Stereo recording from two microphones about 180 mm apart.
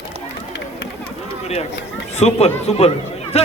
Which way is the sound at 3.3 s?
35° left (ahead or behind).